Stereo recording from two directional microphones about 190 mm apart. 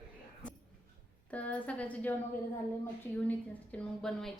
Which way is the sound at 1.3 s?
5° left (ahead or behind).